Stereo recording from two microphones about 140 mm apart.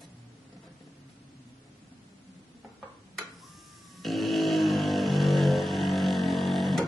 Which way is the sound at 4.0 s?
Centre (ahead or behind).